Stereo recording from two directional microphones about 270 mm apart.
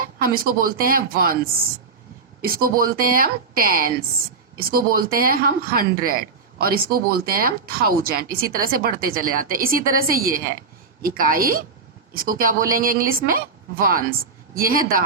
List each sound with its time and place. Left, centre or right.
0.0 s a woman's voice: right